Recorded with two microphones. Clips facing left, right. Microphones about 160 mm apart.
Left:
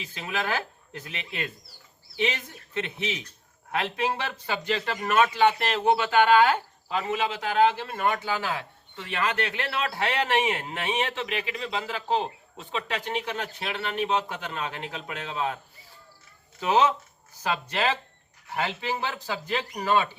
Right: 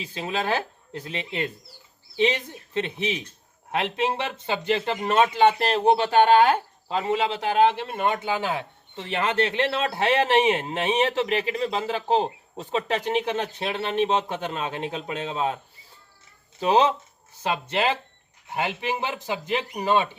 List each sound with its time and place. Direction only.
0.0 s speech: 30° right (ahead or behind)
5.5 s a man's voice: 35° right (ahead or behind)
10.9 s a man's voice: 40° right (ahead or behind)
13.0 s a man's voice: 25° right (ahead or behind)